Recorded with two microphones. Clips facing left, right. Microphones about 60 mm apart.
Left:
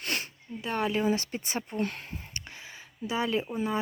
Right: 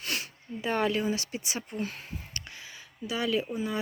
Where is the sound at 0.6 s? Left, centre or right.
Centre.